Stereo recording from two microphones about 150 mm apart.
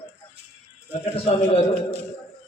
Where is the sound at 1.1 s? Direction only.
40° left (ahead or behind).